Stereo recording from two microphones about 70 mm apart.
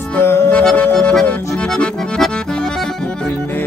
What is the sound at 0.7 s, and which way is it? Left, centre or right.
Music, left.